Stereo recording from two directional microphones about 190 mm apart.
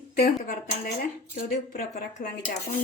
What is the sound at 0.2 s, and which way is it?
A woman's voice, 50° left (ahead or behind).